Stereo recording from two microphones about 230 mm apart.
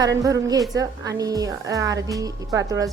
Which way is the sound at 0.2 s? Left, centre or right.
Centre.